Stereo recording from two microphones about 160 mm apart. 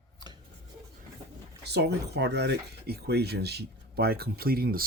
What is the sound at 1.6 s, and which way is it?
Speech, 90° right.